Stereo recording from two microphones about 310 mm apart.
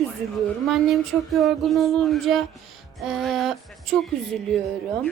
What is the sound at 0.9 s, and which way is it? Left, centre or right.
A woman's voice, centre.